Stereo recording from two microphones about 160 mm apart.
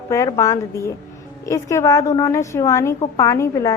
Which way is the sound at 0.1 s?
20° left (ahead or behind).